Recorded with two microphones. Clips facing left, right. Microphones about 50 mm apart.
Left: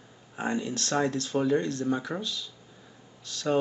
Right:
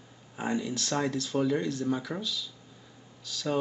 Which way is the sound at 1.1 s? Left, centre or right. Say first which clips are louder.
Left 2 dB; left.